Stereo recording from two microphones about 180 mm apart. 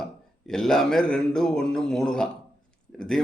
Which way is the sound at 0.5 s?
Centre (ahead or behind).